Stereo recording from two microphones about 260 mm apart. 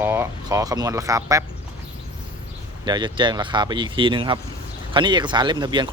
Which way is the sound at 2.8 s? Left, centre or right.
Centre.